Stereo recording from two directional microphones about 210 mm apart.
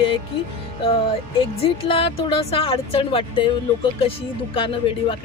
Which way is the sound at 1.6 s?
25° left (ahead or behind).